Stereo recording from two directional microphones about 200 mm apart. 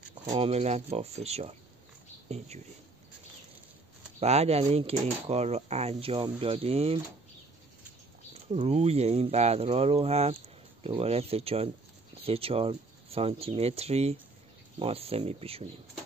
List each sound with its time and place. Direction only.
0.3 s speech: 30° right (ahead or behind)
4.2 s speech: 30° right (ahead or behind)
8.5 s speech: 30° right (ahead or behind)